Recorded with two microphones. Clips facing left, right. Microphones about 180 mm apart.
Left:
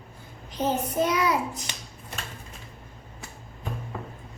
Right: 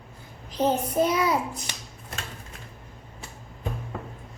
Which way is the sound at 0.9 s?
25° right (ahead or behind).